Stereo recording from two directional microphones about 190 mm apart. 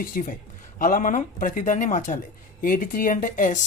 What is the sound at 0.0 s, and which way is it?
Speech, 45° left (ahead or behind).